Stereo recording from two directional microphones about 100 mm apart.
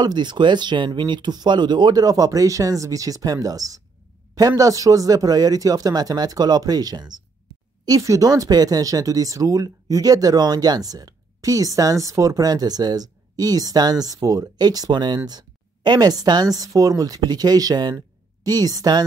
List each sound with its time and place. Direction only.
0.0 s a woman's voice: 45° right (ahead or behind)